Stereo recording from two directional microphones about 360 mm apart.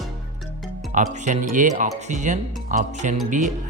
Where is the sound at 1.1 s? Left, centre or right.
Centre.